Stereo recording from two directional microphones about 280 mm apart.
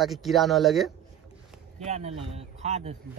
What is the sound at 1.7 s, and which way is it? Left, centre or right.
A man's voice, right.